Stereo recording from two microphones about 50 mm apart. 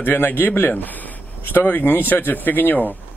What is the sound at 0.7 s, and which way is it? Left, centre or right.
Speech, left.